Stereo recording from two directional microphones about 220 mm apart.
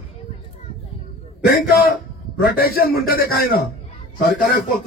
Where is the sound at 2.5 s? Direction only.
45° left (ahead or behind).